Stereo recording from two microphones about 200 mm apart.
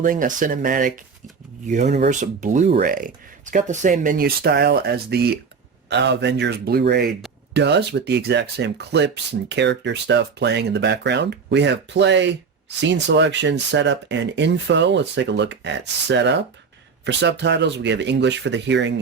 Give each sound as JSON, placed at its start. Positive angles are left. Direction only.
{"t": 0.0, "sound": "speech", "side_deg": -40}